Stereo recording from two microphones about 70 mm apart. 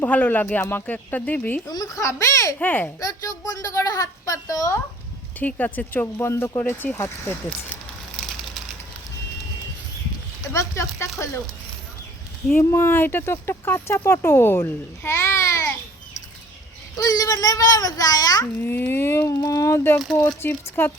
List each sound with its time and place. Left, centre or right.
0.0 s speech: left
1.7 s a child's voice: left
2.0 s a woman's voice: left
2.6 s speech: left
3.0 s a woman's voice: left
5.4 s speech: left
6.1 s speech: left
8.1 s a sound: centre
10.5 s a woman's voice: left
12.5 s speech: left
17.0 s a child's voice: left
18.6 s speech: left
19.3 s a woman's voice: left
20.4 s speech: left